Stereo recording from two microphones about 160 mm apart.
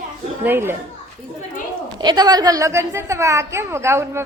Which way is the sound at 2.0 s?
25° right (ahead or behind).